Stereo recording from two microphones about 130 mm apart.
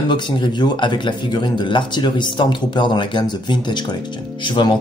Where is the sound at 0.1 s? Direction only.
35° left (ahead or behind).